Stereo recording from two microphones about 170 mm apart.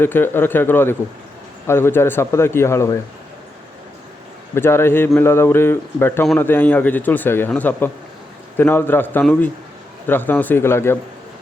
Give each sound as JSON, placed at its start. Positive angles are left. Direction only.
{"t": 0.0, "sound": "a man's voice", "side_deg": 10}
{"t": 4.5, "sound": "a man's voice", "side_deg": 15}